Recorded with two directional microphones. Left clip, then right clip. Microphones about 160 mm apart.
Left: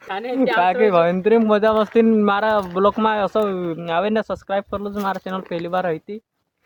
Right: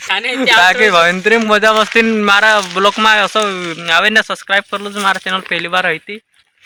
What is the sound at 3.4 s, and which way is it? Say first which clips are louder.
Speech: right 5 dB; 20° right (ahead or behind).